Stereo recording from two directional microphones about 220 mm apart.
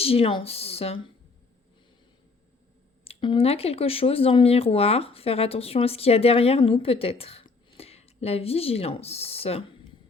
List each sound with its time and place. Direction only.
0.0 s speech: 25° left (ahead or behind)
3.0 s speech: 25° left (ahead or behind)